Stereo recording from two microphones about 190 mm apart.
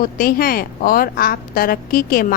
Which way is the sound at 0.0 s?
50° left (ahead or behind).